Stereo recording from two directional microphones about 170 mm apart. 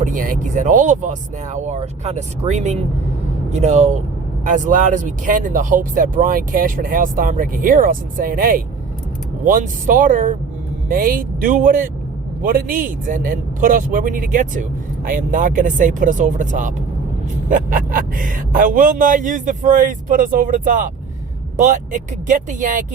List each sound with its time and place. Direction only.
0.0 s a man's voice: 50° right (ahead or behind)